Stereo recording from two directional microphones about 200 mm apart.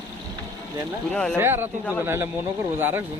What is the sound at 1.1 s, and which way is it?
Speech, 5° left (ahead or behind).